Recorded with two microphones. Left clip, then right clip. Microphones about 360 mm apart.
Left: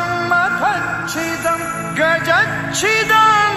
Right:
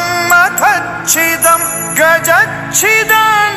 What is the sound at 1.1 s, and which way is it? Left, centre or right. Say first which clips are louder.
Music: right 12 dB; right.